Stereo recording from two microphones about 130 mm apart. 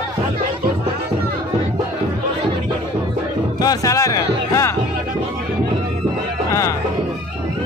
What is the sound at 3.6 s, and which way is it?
Music, 25° left (ahead or behind).